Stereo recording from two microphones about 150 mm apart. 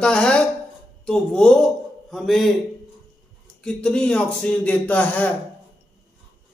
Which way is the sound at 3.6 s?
5° left (ahead or behind).